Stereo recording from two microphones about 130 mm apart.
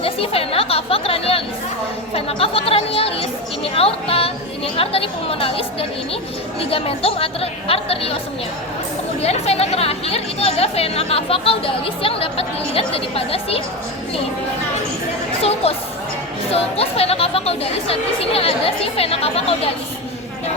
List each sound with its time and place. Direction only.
0.0 s a sound: 45° left (ahead or behind)
2.1 s chatter: 45° left (ahead or behind)
4.8 s speech: 45° left (ahead or behind)
9.2 s speech: 55° left (ahead or behind)
15.4 s a woman's voice: 50° left (ahead or behind)